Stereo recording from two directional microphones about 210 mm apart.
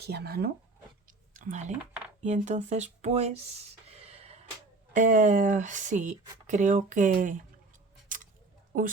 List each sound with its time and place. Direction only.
0.0 s speech: 50° right (ahead or behind)
1.0 s a sound: 40° right (ahead or behind)
2.2 s speech: 35° right (ahead or behind)
3.8 s gasp: 30° right (ahead or behind)
4.9 s speech: 35° right (ahead or behind)
6.5 s scissors: 35° right (ahead or behind)
8.7 s speech: 40° right (ahead or behind)